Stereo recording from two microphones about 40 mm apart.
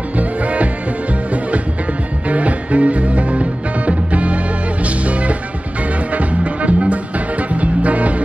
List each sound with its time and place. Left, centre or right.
0.1 s music: right
2.2 s music: right